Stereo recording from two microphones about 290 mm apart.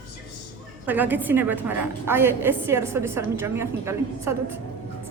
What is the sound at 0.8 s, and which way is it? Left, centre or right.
A woman's voice, centre.